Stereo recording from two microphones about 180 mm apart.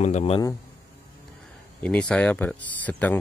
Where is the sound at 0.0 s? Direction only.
35° left (ahead or behind).